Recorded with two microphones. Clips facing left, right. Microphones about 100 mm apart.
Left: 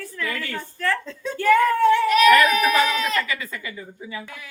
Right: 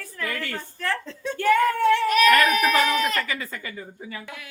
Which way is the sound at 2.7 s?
45° right (ahead or behind).